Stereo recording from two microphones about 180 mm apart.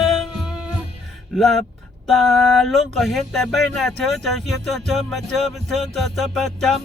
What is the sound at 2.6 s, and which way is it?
Music, centre (ahead or behind).